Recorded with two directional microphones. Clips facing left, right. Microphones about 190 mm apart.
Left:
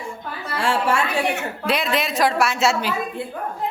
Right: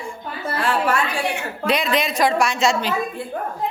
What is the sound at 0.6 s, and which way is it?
Speech, 25° left (ahead or behind).